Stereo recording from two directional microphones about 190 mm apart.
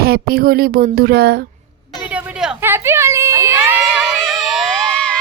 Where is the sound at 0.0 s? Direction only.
55° right (ahead or behind).